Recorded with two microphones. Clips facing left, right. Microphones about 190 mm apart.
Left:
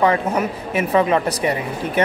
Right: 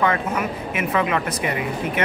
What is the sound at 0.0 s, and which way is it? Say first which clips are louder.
Speech: left 4 dB; 35° left (ahead or behind).